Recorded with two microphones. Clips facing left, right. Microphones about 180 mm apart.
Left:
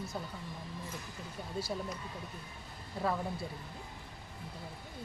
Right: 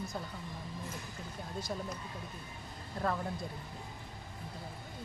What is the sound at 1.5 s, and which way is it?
Speech, 10° left (ahead or behind).